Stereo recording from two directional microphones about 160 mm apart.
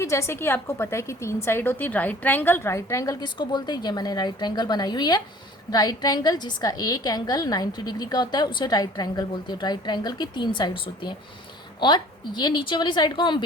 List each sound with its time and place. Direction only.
0.0 s a woman's voice: 15° left (ahead or behind)